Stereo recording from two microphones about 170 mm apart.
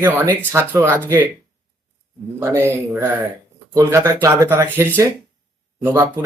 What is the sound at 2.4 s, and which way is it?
Speech, 15° right (ahead or behind).